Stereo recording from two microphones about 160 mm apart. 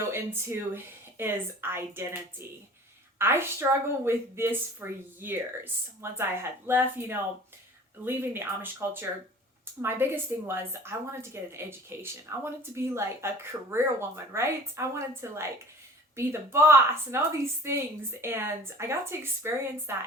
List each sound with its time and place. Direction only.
0.1 s a woman's voice: 15° right (ahead or behind)
3.2 s a woman's voice: 15° right (ahead or behind)
18.2 s a woman's voice: 15° right (ahead or behind)